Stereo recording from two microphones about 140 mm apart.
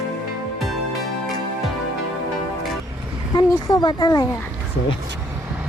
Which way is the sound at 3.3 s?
30° left (ahead or behind).